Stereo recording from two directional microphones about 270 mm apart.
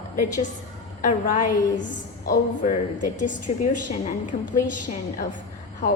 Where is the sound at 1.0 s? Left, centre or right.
Left.